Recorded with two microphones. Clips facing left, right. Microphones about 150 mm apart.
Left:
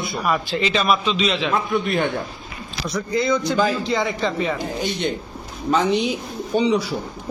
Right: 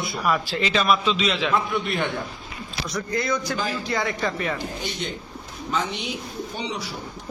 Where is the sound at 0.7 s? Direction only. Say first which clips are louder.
Even; centre (ahead or behind).